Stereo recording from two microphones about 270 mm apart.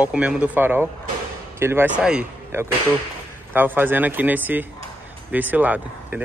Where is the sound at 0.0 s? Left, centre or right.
Centre.